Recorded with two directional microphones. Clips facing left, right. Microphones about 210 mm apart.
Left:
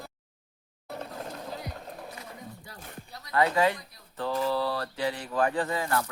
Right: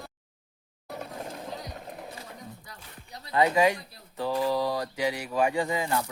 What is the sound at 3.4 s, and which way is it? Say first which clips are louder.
Speech: right 2 dB; 15° right (ahead or behind).